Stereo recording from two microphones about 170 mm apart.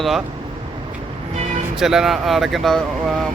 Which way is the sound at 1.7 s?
Centre (ahead or behind).